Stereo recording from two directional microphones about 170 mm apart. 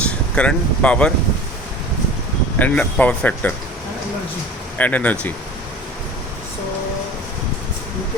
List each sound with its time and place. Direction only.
0.3 s speech: 5° left (ahead or behind)
2.6 s speech: 10° left (ahead or behind)
4.8 s speech: 10° left (ahead or behind)